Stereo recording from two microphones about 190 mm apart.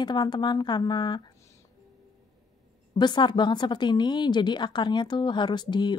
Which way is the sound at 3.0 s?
25° left (ahead or behind).